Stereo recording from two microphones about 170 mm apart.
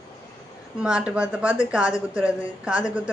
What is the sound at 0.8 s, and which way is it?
A woman's voice, 5° right (ahead or behind).